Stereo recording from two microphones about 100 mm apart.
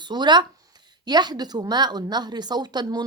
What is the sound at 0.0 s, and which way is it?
A woman's voice, 45° right (ahead or behind).